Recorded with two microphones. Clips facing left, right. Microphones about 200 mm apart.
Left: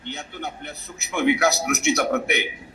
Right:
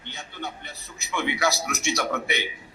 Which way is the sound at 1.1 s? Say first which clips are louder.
Left 6 dB; 50° left (ahead or behind).